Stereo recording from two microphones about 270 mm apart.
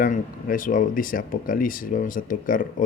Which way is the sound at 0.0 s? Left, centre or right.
Left.